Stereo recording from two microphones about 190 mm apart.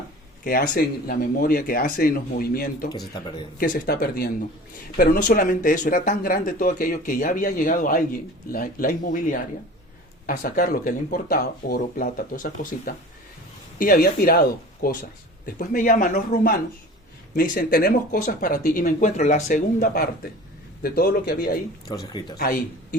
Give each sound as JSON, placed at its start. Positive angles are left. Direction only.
{"t": 0.4, "sound": "speech", "side_deg": 50}
{"t": 21.8, "sound": "speech", "side_deg": 20}
{"t": 22.4, "sound": "speech", "side_deg": 50}